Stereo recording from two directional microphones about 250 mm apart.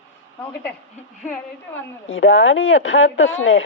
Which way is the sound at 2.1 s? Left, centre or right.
Left.